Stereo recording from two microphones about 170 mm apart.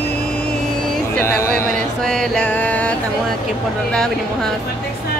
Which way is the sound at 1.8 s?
5° left (ahead or behind).